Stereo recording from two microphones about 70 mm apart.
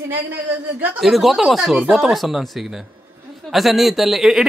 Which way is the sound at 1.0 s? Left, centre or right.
Centre.